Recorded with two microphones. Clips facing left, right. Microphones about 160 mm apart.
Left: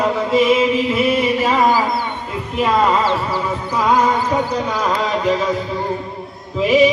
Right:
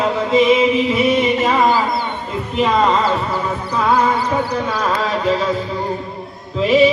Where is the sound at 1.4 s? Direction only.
10° left (ahead or behind).